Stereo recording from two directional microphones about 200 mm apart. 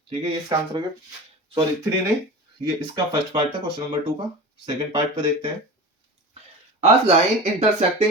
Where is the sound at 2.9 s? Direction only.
20° right (ahead or behind).